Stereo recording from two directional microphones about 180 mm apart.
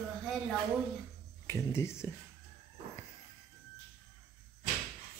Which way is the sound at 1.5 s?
15° left (ahead or behind).